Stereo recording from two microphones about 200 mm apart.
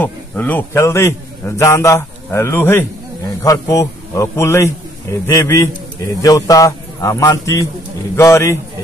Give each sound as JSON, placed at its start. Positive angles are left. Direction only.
{"t": 0.0, "sound": "a man's voice", "side_deg": 10}